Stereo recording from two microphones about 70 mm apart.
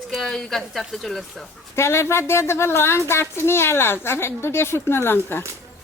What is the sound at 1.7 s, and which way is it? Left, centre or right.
A woman's voice, left.